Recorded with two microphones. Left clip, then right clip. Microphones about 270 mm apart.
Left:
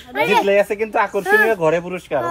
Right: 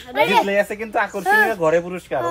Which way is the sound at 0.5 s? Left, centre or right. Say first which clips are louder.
Left 4 dB; left.